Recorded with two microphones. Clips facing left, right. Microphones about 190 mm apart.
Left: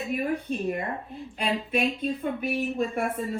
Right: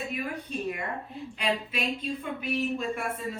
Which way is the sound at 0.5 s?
50° left (ahead or behind).